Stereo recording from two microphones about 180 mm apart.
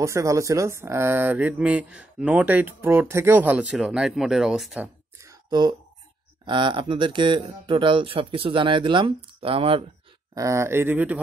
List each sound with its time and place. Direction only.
0.0 s speech: 15° right (ahead or behind)
5.2 s a sound: 20° right (ahead or behind)
6.4 s speech: 25° right (ahead or behind)
10.3 s speech: 15° right (ahead or behind)